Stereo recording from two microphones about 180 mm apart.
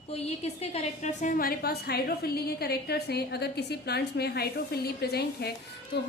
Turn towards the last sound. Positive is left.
turn(degrees=60)  # may be behind; listen again after turning